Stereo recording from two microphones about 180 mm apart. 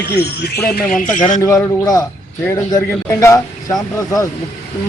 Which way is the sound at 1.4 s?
15° left (ahead or behind).